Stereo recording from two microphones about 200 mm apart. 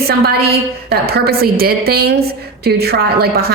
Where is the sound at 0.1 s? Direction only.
50° right (ahead or behind).